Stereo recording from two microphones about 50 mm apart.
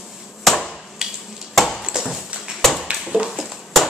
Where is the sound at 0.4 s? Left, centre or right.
Centre.